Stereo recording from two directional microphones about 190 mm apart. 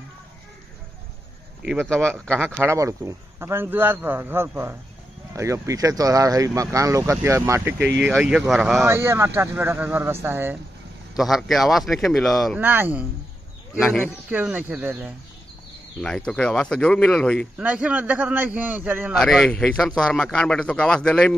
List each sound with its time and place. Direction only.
1.6 s speech: centre (ahead or behind)
2.6 s speech: 15° right (ahead or behind)
7.8 s speech: 70° right (ahead or behind)
8.1 s speech: centre (ahead or behind)
8.8 s speech: 15° right (ahead or behind)
12.6 s speech: 10° right (ahead or behind)
13.7 s speech: centre (ahead or behind)
14.3 s speech: 10° right (ahead or behind)
16.0 s speech: 5° left (ahead or behind)
17.6 s speech: 5° right (ahead or behind)